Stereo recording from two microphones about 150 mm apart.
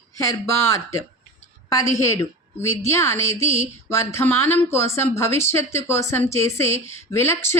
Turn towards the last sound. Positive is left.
turn(degrees=20)  # may be behind; listen again after turning